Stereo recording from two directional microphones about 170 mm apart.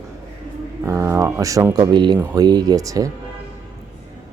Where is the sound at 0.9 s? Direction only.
15° right (ahead or behind).